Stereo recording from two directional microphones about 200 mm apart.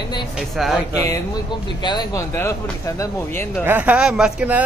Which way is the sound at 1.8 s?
20° left (ahead or behind).